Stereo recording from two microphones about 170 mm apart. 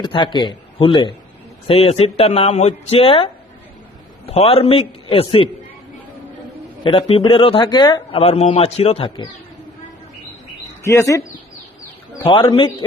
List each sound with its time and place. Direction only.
0.0 s a man's voice: 30° left (ahead or behind)
4.3 s a man's voice: 35° left (ahead or behind)
6.8 s a man's voice: 30° left (ahead or behind)
10.8 s speech: 15° left (ahead or behind)
12.2 s a man's voice: 30° left (ahead or behind)